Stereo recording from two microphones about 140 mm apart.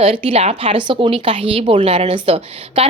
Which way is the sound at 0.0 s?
40° right (ahead or behind).